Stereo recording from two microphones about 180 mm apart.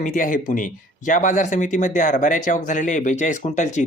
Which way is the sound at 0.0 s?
45° left (ahead or behind).